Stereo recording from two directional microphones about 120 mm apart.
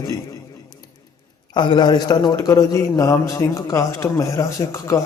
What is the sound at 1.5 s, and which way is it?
A man's voice, 40° left (ahead or behind).